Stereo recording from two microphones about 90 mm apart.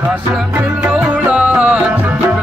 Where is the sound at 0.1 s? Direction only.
5° right (ahead or behind).